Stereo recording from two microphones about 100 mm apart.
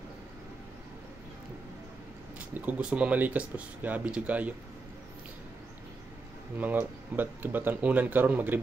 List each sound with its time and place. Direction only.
2.5 s speech: 15° right (ahead or behind)
6.5 s speech: 15° right (ahead or behind)